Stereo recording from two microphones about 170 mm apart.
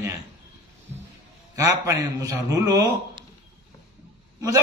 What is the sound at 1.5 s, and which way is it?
A man's voice, 20° right (ahead or behind).